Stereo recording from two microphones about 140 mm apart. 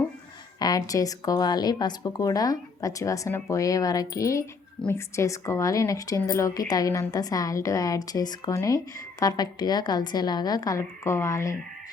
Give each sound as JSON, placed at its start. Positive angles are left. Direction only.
{"t": 0.6, "sound": "speech", "side_deg": 25}